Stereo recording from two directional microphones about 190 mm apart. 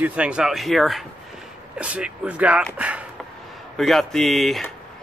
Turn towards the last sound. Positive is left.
turn(degrees=0)  # may be behind; listen again after turning